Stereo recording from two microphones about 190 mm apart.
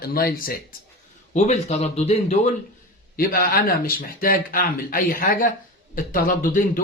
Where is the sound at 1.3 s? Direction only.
35° left (ahead or behind).